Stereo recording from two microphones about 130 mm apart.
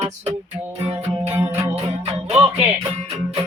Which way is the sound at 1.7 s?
50° right (ahead or behind).